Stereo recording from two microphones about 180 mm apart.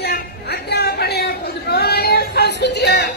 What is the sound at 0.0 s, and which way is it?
Chatter, 60° left (ahead or behind).